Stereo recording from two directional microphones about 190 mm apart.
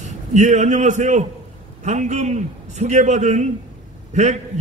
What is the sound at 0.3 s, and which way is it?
A man's voice, 40° right (ahead or behind).